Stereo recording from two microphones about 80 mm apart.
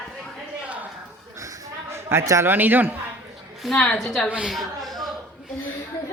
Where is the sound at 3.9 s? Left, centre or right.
Centre.